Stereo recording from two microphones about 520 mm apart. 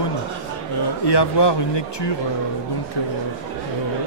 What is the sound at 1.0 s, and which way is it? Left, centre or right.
Speech, left.